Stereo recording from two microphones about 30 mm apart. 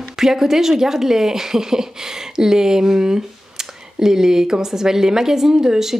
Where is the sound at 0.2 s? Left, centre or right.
Centre.